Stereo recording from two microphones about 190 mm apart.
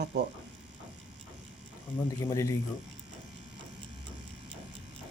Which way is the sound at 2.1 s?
15° left (ahead or behind).